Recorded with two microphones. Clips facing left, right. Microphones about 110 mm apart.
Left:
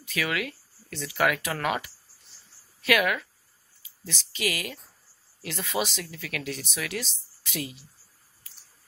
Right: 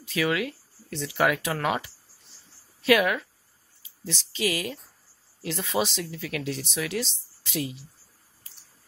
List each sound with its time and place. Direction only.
0.0 s speech: 25° right (ahead or behind)